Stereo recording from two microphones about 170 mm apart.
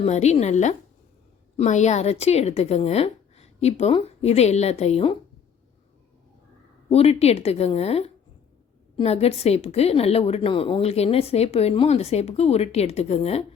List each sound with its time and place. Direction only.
0.0 s a woman's voice: 40° left (ahead or behind)
6.9 s a woman's voice: 35° left (ahead or behind)